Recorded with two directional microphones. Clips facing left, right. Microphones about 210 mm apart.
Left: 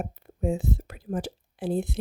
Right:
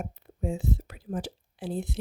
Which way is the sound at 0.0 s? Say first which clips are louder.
Left 4 dB; 50° left (ahead or behind).